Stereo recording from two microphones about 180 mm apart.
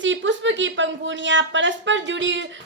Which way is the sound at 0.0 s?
90° right.